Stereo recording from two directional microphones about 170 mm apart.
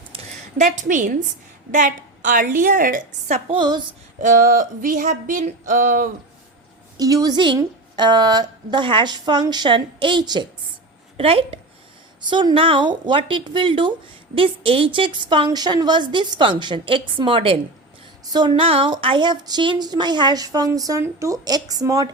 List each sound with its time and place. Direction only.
0.1 s a sound: 40° right (ahead or behind)
1.7 s speech: 50° right (ahead or behind)
3.5 s a woman's voice: 25° right (ahead or behind)
4.2 s speech: 50° right (ahead or behind)
6.9 s a woman's voice: 20° right (ahead or behind)